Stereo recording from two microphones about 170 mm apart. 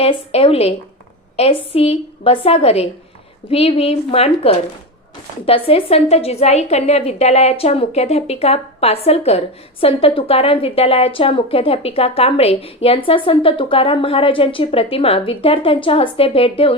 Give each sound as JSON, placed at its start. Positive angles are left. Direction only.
{"t": 0.0, "sound": "a woman's voice", "side_deg": 35}